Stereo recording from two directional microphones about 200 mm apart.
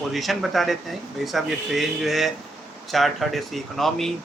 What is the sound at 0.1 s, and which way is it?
Speech, centre (ahead or behind).